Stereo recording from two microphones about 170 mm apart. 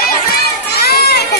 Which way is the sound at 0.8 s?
65° left (ahead or behind).